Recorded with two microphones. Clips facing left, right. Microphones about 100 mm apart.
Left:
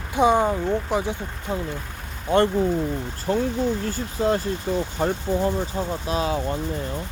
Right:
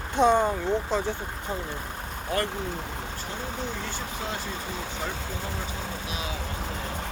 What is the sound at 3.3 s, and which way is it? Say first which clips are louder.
Speech: left 18 dB; 75° left (ahead or behind).